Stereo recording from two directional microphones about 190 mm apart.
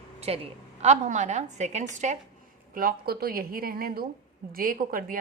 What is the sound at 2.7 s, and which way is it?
A woman's voice, 50° right (ahead or behind).